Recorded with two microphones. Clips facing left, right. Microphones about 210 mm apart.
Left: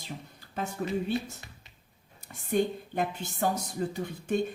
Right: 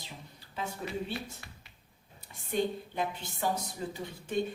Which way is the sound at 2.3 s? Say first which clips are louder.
Left 4 dB; 50° left (ahead or behind).